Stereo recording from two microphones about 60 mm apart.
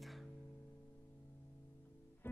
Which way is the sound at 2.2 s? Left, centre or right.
Left.